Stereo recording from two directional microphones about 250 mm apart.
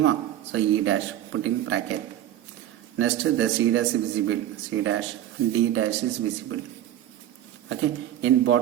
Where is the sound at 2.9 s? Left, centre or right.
Right.